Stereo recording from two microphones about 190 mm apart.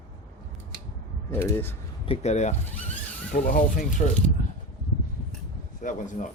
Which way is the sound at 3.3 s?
45° left (ahead or behind).